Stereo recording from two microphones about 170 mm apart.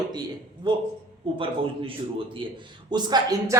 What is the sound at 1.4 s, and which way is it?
A man's voice, 30° right (ahead or behind).